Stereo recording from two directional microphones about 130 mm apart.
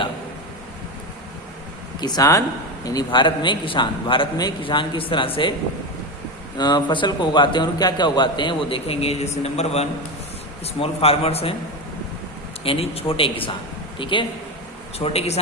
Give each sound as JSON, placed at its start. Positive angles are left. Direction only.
{"t": 2.0, "sound": "a man's voice", "side_deg": 30}
{"t": 6.6, "sound": "a man's voice", "side_deg": 35}
{"t": 12.6, "sound": "a man's voice", "side_deg": 50}
{"t": 14.9, "sound": "a man's voice", "side_deg": 50}